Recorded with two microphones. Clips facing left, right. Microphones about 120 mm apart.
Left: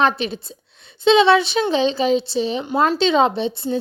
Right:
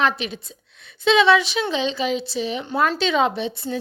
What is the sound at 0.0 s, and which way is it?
A woman's voice, 35° left (ahead or behind).